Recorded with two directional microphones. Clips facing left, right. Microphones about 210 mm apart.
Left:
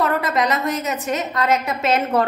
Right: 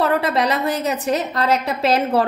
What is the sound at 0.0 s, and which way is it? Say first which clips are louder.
A woman's voice: right 2 dB; 30° right (ahead or behind).